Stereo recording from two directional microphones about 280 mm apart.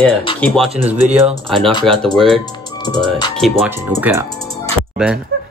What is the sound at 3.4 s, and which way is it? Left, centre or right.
Speech, centre.